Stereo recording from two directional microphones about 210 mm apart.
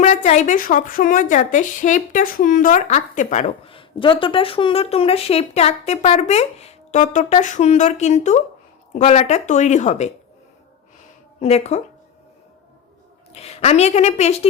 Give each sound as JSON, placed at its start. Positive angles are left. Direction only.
{"t": 0.0, "sound": "a woman's voice", "side_deg": 35}
{"t": 11.3, "sound": "speech", "side_deg": 30}
{"t": 13.3, "sound": "a woman's voice", "side_deg": 30}